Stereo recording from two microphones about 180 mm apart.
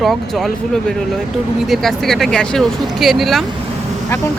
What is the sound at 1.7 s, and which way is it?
Speech, centre (ahead or behind).